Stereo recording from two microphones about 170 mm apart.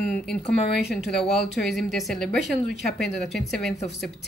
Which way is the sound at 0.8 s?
Centre (ahead or behind).